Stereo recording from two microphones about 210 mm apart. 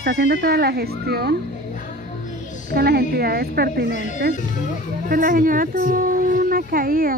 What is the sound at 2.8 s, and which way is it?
Speech, 50° right (ahead or behind).